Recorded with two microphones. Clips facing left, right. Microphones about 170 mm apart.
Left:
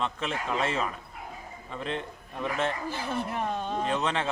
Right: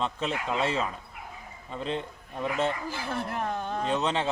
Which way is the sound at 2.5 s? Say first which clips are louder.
Right 1 dB; centre (ahead or behind).